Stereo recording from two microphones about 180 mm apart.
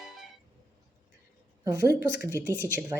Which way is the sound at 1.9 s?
65° left (ahead or behind).